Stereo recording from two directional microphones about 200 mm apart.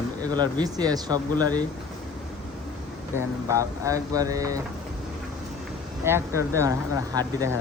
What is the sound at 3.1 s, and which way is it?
Speech, 15° right (ahead or behind).